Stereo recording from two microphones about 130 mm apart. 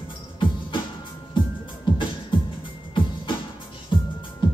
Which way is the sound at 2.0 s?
40° left (ahead or behind).